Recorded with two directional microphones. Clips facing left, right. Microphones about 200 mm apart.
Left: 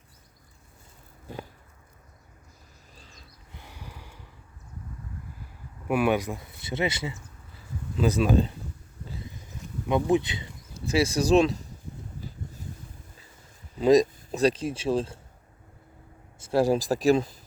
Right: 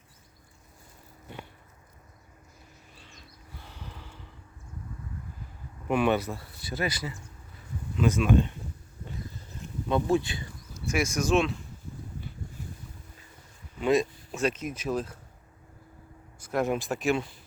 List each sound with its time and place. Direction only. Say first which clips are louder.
2.9 s a sound: left 3 dB; 40° left (ahead or behind)
3.5 s a sound: even; 15° left (ahead or behind)
5.9 s speech: left 1 dB; 10° left (ahead or behind); by 8.5 s 35° left (ahead or behind)
9.3 s insect: left 1 dB; 15° left (ahead or behind)
10.8 s speech: left 4 dB; 30° left (ahead or behind)
12.4 s boat: left 2 dB; 20° left (ahead or behind)
13.7 s speech: left 6 dB; 35° left (ahead or behind)
16.4 s speech: left 5 dB; 30° left (ahead or behind)